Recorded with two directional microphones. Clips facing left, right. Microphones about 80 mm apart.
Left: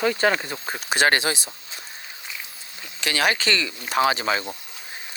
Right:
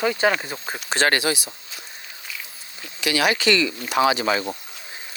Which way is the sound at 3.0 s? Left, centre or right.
Left.